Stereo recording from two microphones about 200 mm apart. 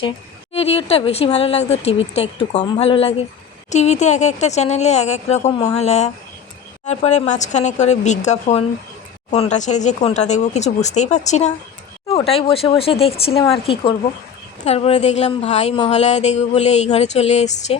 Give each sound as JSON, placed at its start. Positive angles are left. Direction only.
{"t": 0.5, "sound": "speech", "side_deg": 30}